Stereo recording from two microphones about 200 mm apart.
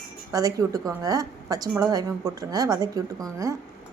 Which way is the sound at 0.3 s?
15° right (ahead or behind).